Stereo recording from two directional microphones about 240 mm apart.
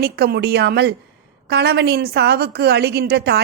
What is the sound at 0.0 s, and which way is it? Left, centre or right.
A woman's voice, right.